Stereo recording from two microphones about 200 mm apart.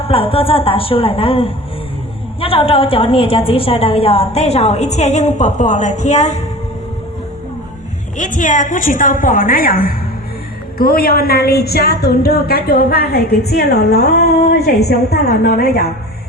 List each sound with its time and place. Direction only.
0.1 s a woman's voice: 25° left (ahead or behind)
8.2 s a woman's voice: 40° left (ahead or behind)